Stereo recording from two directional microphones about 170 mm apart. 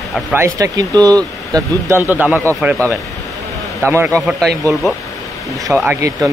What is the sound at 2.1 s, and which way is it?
Speech, 10° right (ahead or behind).